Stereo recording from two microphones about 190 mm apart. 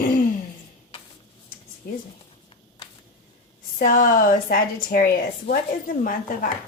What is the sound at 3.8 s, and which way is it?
A woman's voice, 45° left (ahead or behind).